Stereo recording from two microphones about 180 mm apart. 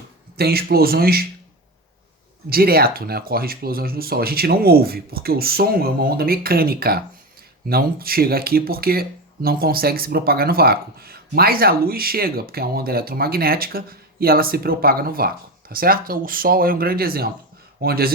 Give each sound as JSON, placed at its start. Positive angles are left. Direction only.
{"t": 0.3, "sound": "speech", "side_deg": -60}
{"t": 2.5, "sound": "speech", "side_deg": -55}